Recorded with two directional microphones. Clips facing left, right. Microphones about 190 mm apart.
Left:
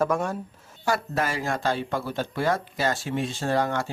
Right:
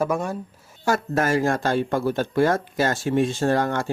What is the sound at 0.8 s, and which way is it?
Speech, 45° right (ahead or behind).